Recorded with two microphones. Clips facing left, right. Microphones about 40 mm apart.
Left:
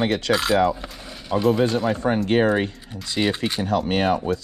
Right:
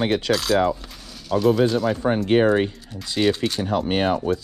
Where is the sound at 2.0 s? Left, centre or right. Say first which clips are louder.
Right 1 dB; centre.